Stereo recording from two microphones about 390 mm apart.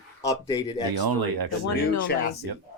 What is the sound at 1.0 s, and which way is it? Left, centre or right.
Speech, right.